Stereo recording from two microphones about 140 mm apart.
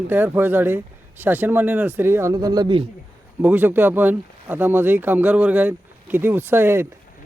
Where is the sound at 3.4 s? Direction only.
15° right (ahead or behind).